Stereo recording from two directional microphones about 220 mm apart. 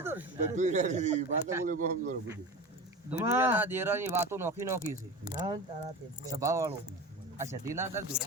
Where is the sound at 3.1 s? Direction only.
10° right (ahead or behind).